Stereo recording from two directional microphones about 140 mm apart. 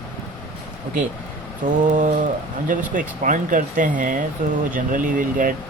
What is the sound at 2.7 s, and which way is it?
Speech, 70° right (ahead or behind).